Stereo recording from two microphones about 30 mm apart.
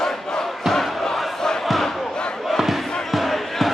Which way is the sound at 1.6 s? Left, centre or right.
Centre.